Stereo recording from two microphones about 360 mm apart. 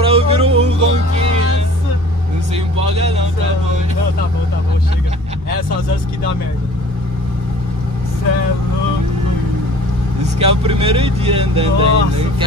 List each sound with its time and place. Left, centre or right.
0.0 s music: centre
2.5 s vehicle: centre
10.4 s speech: centre